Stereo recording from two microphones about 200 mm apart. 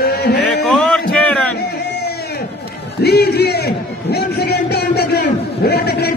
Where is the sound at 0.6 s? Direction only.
Centre (ahead or behind).